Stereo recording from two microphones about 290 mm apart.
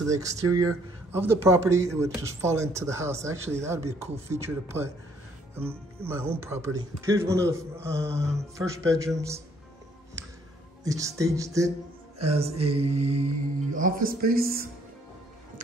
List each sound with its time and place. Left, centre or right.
0.0 s speech: centre
6.0 s speech: centre
10.8 s speech: centre
12.2 s speech: right
13.1 s music: right
14.0 s speech: right